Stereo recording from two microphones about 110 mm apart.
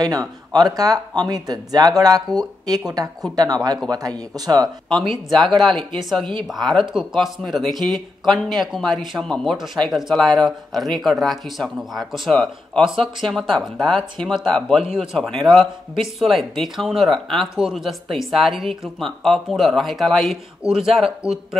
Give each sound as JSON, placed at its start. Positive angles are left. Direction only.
{"t": 0.0, "sound": "speech", "side_deg": -35}
{"t": 3.9, "sound": "speech", "side_deg": -35}
{"t": 5.0, "sound": "speech", "side_deg": 0}